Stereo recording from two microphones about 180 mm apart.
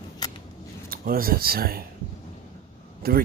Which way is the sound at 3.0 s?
60° right (ahead or behind).